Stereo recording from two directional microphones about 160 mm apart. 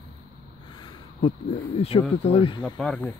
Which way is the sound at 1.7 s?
35° left (ahead or behind).